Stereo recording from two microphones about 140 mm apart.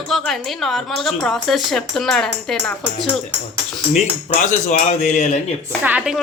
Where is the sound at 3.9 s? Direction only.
55° left (ahead or behind).